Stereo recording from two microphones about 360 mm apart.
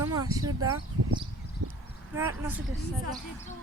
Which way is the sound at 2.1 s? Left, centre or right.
Centre.